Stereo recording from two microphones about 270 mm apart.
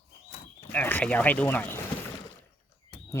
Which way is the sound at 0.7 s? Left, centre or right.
Centre.